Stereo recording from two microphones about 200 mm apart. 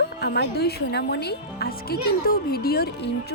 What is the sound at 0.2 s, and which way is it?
A woman's voice, 55° left (ahead or behind).